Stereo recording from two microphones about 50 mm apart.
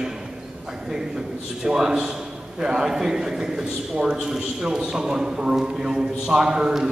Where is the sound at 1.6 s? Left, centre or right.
Centre.